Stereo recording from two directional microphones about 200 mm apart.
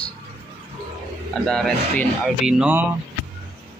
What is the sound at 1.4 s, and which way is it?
Speech, 5° left (ahead or behind).